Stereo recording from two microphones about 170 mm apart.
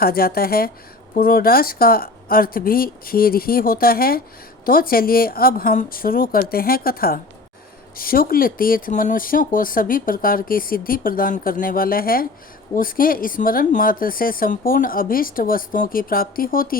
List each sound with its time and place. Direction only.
0.0 s speech: 60° left (ahead or behind)